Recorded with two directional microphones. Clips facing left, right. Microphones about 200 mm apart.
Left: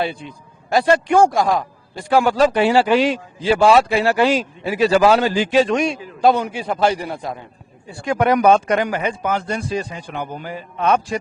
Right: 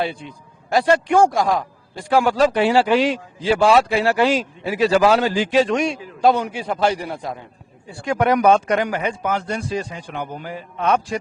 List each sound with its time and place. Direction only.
0.7 s speech: 10° left (ahead or behind)
8.0 s speech: 10° left (ahead or behind)